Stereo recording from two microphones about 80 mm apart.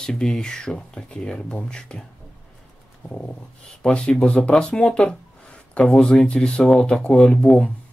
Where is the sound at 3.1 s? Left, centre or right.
Centre.